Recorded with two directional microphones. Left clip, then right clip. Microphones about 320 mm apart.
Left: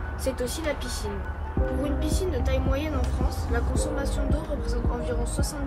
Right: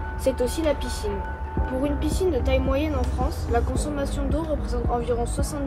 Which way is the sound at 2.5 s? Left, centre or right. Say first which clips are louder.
Right 5 dB; centre.